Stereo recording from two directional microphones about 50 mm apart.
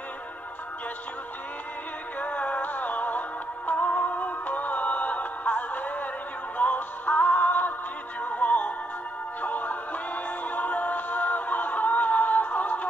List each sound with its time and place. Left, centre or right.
2.1 s music: left